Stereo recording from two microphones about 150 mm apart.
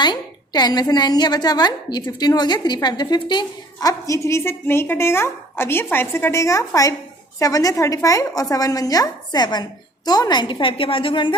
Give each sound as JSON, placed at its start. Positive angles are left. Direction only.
{"t": 0.0, "sound": "a woman's voice", "side_deg": 30}